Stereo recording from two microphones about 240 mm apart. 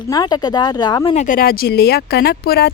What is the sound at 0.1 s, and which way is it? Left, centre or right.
Speech, centre.